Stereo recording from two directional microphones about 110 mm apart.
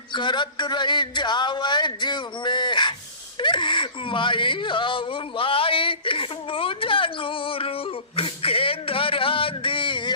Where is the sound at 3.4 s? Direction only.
45° left (ahead or behind).